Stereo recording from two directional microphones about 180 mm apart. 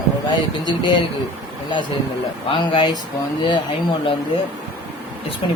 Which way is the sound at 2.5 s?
25° left (ahead or behind).